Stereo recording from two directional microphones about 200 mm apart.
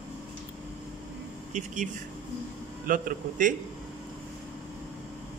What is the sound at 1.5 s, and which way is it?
Speech, 35° right (ahead or behind).